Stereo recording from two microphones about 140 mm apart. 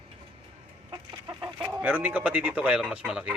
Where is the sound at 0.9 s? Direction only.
35° right (ahead or behind).